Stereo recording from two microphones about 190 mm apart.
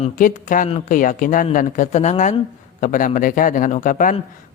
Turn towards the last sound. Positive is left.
turn(degrees=45)  # may be behind; listen again after turning